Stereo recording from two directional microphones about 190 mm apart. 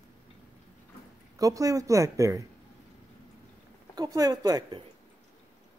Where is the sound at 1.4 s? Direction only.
20° right (ahead or behind).